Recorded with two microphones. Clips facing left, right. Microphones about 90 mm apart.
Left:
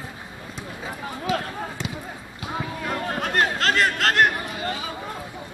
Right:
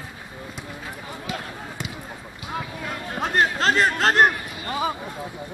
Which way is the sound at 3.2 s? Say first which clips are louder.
Right 3 dB; 25° right (ahead or behind).